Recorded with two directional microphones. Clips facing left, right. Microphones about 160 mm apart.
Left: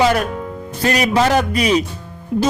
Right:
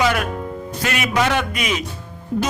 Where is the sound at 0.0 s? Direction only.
40° left (ahead or behind).